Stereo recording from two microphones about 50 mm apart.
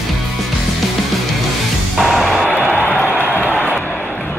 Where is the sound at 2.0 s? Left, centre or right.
Centre.